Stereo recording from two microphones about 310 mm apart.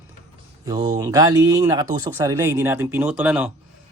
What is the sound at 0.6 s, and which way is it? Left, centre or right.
Speech, centre.